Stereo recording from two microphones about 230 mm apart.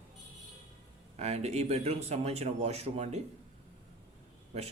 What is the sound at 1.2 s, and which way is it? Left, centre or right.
Speech, right.